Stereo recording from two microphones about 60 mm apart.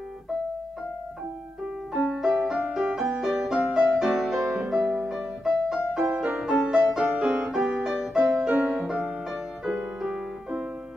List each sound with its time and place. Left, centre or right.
2.0 s music: centre
3.9 s music: centre
7.2 s music: right
8.0 s music: centre
10.0 s music: centre